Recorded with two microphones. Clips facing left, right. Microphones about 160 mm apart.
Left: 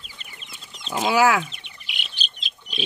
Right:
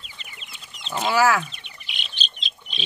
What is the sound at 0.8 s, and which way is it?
Chicken, 5° left (ahead or behind).